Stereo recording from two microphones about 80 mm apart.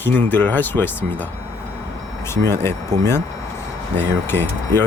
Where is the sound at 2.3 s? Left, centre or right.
Left.